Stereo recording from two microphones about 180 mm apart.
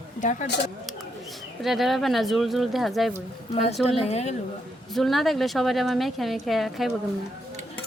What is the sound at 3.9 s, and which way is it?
Speech, 35° left (ahead or behind).